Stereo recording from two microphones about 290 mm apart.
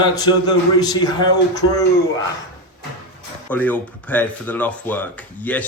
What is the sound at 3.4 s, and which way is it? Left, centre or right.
Speech, centre.